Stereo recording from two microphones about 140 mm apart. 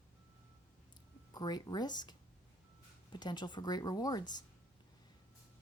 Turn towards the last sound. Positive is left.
turn(degrees=30)  # may be behind; listen again after turning